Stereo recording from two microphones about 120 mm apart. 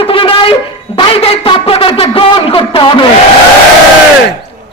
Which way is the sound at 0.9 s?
50° left (ahead or behind).